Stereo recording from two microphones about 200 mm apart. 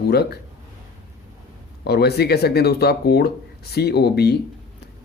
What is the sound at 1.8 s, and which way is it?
Speech, 55° left (ahead or behind).